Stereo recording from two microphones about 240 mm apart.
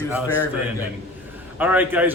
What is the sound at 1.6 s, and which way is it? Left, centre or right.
Speech, centre.